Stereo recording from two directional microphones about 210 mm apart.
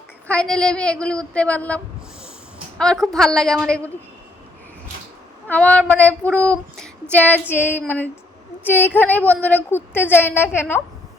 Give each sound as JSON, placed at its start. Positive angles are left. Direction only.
{"t": 0.3, "sound": "a woman's voice", "side_deg": 5}
{"t": 5.5, "sound": "child singing", "side_deg": 5}